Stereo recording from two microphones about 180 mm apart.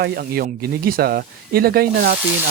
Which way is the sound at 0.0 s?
55° right (ahead or behind).